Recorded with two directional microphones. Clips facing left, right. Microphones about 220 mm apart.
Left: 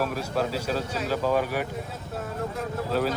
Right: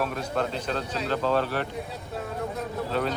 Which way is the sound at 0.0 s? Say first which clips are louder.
Left 1 dB; 5° left (ahead or behind).